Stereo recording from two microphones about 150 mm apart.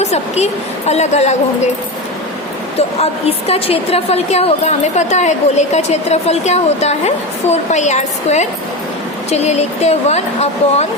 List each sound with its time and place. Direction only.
0.0 s a woman's voice: 45° left (ahead or behind)
2.7 s a woman's voice: 40° left (ahead or behind)